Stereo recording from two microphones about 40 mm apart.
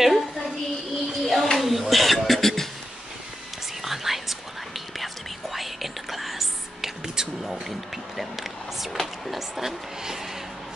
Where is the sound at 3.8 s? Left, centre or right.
Centre.